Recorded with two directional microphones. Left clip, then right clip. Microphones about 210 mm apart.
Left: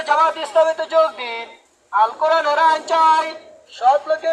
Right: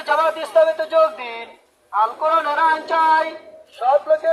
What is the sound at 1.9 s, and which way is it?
Speech, 40° left (ahead or behind).